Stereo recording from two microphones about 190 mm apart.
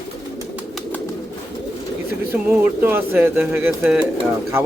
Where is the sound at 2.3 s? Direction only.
10° right (ahead or behind).